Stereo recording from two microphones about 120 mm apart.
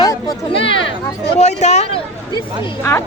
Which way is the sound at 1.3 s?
70° left (ahead or behind).